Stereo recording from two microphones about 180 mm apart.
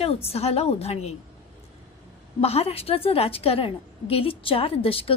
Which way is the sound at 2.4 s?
35° left (ahead or behind).